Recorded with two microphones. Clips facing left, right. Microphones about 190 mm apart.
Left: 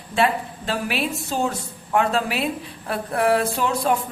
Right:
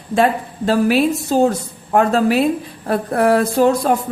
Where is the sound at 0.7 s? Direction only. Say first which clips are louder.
Right 11 dB; 40° right (ahead or behind).